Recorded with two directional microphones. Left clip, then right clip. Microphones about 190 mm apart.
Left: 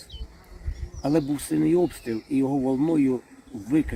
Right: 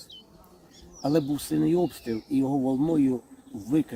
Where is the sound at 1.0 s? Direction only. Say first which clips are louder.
Left 1 dB; 15° right (ahead or behind).